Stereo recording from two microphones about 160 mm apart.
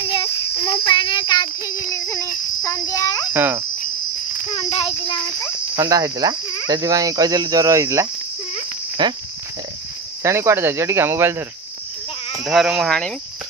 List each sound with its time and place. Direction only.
0.1 s child singing: 35° left (ahead or behind)
1.9 s speech: 20° left (ahead or behind)
3.3 s speech: 15° right (ahead or behind)
4.6 s child singing: 35° left (ahead or behind)
5.8 s speech: 20° right (ahead or behind)
10.2 s speech: 15° right (ahead or behind)
12.4 s speech: centre (ahead or behind)